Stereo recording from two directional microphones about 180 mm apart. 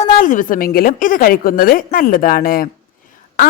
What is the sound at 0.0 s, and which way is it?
A woman's voice, 45° left (ahead or behind).